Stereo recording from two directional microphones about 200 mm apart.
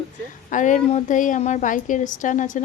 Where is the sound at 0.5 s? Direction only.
40° left (ahead or behind).